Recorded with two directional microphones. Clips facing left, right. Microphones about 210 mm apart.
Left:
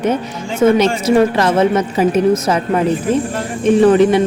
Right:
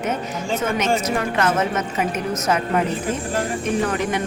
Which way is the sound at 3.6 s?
30° left (ahead or behind).